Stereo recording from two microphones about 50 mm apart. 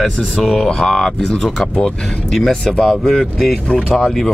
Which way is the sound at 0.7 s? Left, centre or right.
Centre.